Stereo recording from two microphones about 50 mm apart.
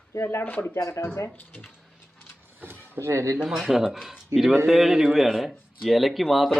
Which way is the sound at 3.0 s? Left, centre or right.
Right.